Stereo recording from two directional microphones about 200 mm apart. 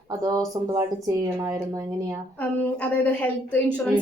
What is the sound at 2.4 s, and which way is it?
A woman's voice, 5° left (ahead or behind).